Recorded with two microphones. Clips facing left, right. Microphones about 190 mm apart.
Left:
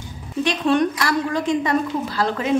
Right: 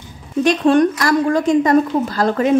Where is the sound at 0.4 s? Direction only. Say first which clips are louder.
Right 6 dB; 45° right (ahead or behind).